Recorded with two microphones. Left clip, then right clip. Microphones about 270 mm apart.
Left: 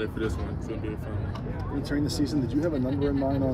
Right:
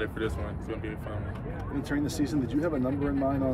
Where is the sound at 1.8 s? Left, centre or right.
Right.